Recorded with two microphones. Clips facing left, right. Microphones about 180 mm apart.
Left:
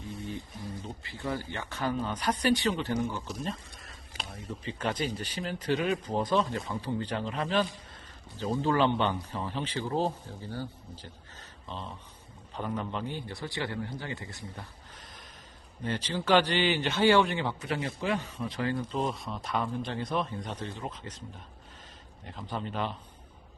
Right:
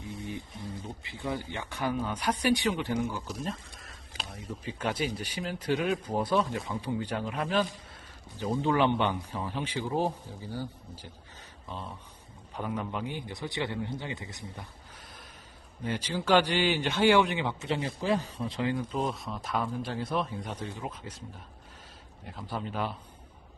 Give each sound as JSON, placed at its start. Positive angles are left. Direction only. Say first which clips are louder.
{"t": 0.2, "sound": "a sound", "louder": "even", "side_deg": -15}
{"t": 1.2, "sound": "a man's voice", "louder": "even", "side_deg": -15}
{"t": 15.8, "sound": "speech", "louder": "even", "side_deg": -10}
{"t": 18.6, "sound": "speech", "louder": "even", "side_deg": -10}
{"t": 22.2, "sound": "speech", "louder": "even", "side_deg": -5}